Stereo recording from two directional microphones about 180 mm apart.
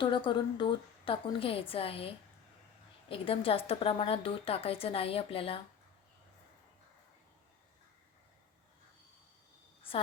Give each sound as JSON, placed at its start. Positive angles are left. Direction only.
{"t": 0.0, "sound": "a woman's voice", "side_deg": 25}
{"t": 3.1, "sound": "a woman's voice", "side_deg": 30}